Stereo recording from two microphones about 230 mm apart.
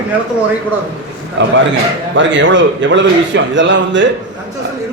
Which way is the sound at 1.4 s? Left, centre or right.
Right.